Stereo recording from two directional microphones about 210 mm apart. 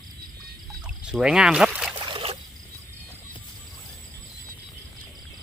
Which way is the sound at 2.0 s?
25° right (ahead or behind).